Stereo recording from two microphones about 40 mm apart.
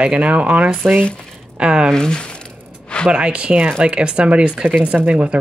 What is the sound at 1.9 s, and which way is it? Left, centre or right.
Speech, centre.